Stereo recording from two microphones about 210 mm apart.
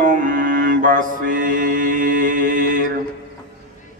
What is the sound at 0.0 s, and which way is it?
Mantra, 40° right (ahead or behind).